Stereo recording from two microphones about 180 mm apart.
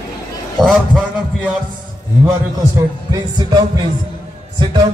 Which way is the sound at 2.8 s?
20° right (ahead or behind).